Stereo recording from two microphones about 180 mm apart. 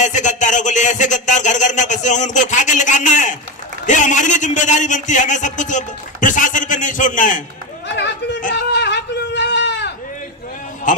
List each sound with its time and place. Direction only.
0.0 s a man's voice: 45° left (ahead or behind)
7.9 s chatter: 75° left (ahead or behind)
8.5 s a sound: 75° left (ahead or behind)
10.9 s music: 45° left (ahead or behind)